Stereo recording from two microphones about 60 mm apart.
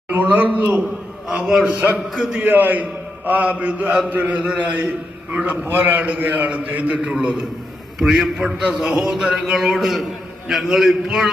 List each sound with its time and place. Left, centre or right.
0.1 s a man's voice: right
1.3 s a man's voice: centre
2.4 s a man's voice: right
5.6 s a man's voice: right; by 11.3 s centre